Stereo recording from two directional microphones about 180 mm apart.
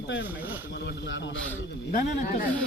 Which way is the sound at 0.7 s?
80° left.